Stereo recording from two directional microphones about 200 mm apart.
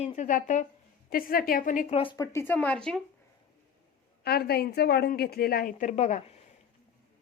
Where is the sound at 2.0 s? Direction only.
20° left (ahead or behind); by 3.0 s 5° left (ahead or behind).